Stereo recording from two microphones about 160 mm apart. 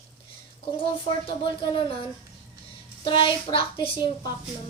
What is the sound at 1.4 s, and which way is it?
Speech, 30° left (ahead or behind).